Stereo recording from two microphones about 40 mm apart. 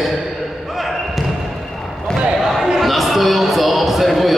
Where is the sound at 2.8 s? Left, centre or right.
Centre.